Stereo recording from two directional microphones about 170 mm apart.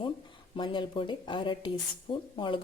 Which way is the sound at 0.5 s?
30° left (ahead or behind).